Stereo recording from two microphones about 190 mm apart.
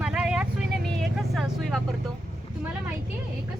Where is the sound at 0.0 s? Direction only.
5° right (ahead or behind).